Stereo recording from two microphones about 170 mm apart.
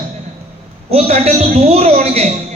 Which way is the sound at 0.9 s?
40° right (ahead or behind).